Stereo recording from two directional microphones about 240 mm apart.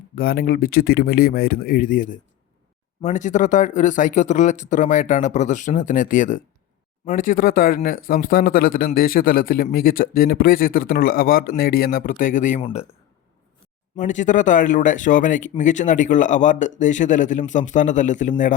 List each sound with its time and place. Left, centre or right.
0.2 s speech: left
13.9 s speech: left